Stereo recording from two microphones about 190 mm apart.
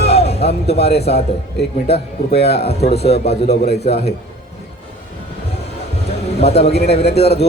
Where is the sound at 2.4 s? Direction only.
35° left (ahead or behind).